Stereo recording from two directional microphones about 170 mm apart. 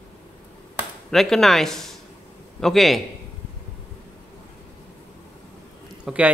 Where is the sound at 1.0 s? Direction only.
Centre (ahead or behind).